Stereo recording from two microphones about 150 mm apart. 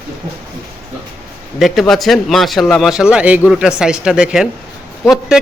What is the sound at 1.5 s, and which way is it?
Speech, centre (ahead or behind).